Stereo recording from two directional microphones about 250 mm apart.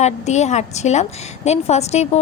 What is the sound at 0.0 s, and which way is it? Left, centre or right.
A woman's voice, left.